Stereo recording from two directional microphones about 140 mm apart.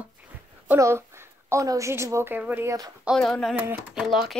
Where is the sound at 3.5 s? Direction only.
15° right (ahead or behind).